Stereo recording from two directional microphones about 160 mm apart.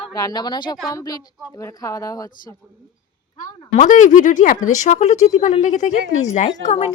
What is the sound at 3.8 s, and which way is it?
A woman's voice, 55° left (ahead or behind).